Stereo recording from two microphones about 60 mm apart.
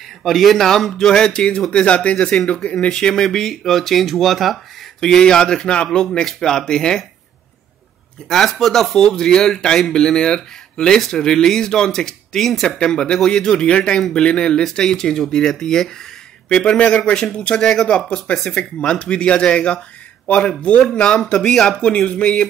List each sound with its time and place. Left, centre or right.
0.2 s speech: centre
5.0 s speech: centre
5.9 s speech: centre
8.3 s speech: centre